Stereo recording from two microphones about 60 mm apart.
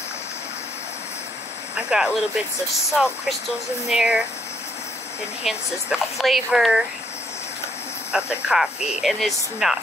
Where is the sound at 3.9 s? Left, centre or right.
Centre.